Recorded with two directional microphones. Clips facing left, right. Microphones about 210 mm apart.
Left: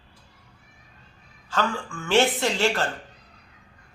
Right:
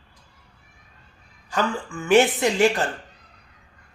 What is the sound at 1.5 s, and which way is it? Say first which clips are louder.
A woman's voice: right 2 dB; 15° right (ahead or behind).